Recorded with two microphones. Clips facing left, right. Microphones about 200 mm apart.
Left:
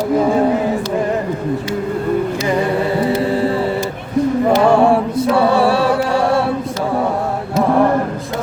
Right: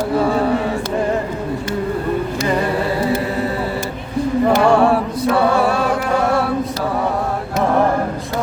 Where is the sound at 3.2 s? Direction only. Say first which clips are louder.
Left 4 dB; 30° left (ahead or behind).